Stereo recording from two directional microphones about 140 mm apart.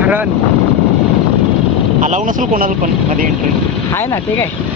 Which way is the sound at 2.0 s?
65° right (ahead or behind).